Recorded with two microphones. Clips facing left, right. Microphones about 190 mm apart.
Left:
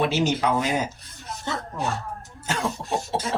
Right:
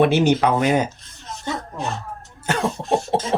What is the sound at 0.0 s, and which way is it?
Speech, 60° right (ahead or behind).